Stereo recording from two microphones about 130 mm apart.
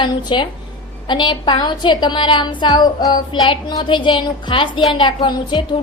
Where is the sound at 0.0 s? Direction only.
35° left (ahead or behind).